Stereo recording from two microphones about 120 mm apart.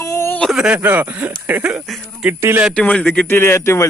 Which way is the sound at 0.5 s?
10° right (ahead or behind).